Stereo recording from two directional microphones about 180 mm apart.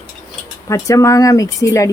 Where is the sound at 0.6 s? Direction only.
15° left (ahead or behind).